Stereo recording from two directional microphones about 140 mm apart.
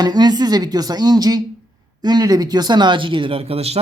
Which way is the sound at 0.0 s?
30° right (ahead or behind).